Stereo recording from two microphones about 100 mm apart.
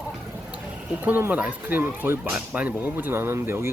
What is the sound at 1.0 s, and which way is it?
Speech, 20° right (ahead or behind).